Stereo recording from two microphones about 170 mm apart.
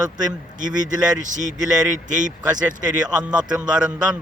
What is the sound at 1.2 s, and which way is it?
Speech, 45° right (ahead or behind).